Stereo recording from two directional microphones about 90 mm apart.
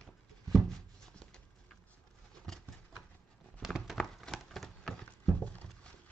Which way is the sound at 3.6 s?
5° right (ahead or behind).